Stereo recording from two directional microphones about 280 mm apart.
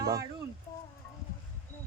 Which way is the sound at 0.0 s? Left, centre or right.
Centre.